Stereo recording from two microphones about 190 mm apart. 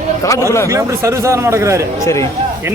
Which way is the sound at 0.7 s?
15° right (ahead or behind).